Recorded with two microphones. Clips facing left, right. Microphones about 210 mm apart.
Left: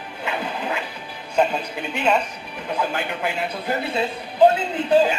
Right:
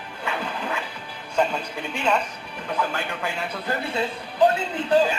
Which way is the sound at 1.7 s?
20° left (ahead or behind).